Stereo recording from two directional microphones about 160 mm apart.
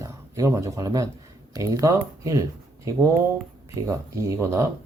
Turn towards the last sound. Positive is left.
turn(degrees=-20)  # may be behind; listen again after turning